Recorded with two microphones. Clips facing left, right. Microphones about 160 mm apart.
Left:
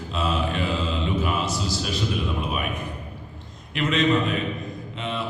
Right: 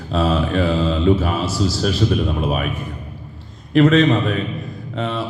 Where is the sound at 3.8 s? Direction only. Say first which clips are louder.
Right 8 dB; 40° right (ahead or behind).